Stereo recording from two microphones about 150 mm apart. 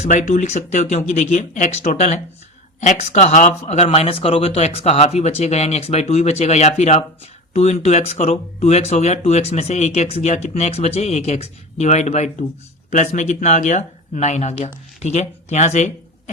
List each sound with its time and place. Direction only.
0.0 s speech: 55° left (ahead or behind)